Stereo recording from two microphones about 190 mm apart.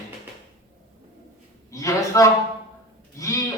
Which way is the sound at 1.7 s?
15° left (ahead or behind).